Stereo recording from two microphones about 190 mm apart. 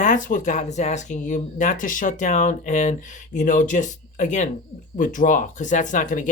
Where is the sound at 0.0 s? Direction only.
40° left (ahead or behind).